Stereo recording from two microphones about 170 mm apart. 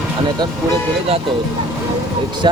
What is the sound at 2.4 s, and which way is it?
Speech, 25° right (ahead or behind).